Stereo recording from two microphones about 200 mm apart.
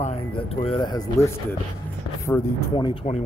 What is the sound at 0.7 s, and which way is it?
Speech, 20° left (ahead or behind).